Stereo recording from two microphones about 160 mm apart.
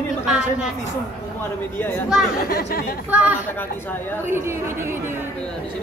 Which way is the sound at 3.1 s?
10° right (ahead or behind).